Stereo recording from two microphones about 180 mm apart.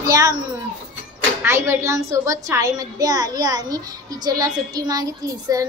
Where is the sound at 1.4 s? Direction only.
15° right (ahead or behind).